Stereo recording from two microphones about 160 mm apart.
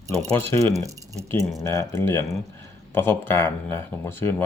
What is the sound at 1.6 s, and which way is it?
Speech, 15° left (ahead or behind).